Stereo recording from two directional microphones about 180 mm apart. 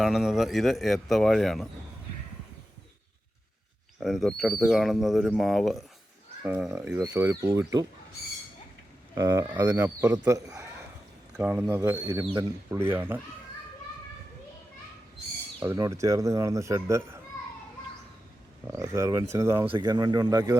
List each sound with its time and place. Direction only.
0.0 s speech: centre (ahead or behind)
4.0 s speech: centre (ahead or behind); by 7.9 s 20° right (ahead or behind)
9.1 s speech: 15° right (ahead or behind)
11.3 s speech: 5° right (ahead or behind)
12.2 s speech: 30° right (ahead or behind)
12.7 s speech: 15° right (ahead or behind)
15.6 s speech: 15° right (ahead or behind)
18.7 s speech: 15° right (ahead or behind)